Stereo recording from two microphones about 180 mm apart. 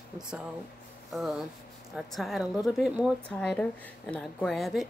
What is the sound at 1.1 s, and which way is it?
A woman's voice, centre (ahead or behind).